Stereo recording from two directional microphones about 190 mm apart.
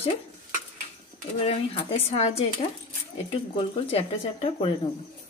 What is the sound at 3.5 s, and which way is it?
Speech, 30° left (ahead or behind).